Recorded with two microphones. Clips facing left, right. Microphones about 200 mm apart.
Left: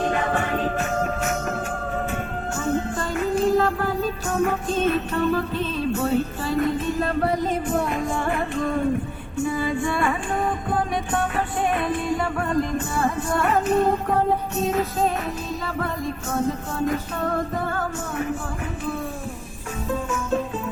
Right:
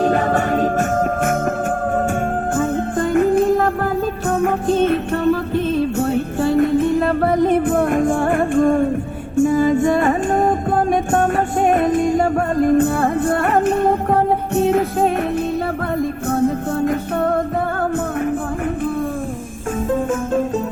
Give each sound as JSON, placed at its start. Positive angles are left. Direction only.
{"t": 0.0, "sound": "music", "side_deg": -40}
{"t": 2.6, "sound": "music", "side_deg": -55}
{"t": 16.8, "sound": "music", "side_deg": -60}